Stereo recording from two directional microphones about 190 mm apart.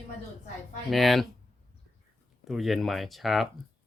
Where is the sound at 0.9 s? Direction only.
Centre (ahead or behind).